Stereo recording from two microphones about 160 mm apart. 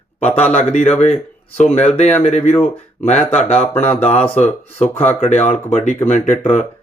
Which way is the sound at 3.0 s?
45° left (ahead or behind).